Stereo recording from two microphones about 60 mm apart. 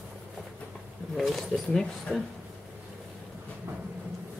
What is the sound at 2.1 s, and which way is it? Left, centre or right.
Speech, left.